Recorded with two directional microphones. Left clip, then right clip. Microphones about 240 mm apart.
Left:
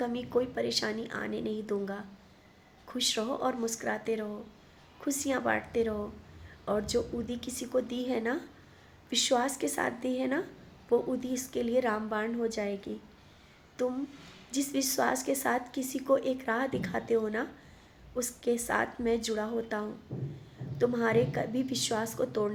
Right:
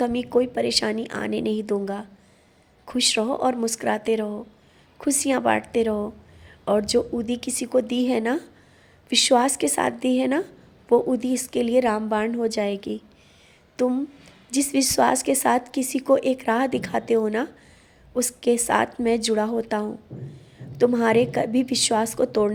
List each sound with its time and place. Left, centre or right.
0.0 s a woman's voice: right